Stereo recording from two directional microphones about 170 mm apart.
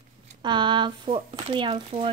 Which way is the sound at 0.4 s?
25° right (ahead or behind).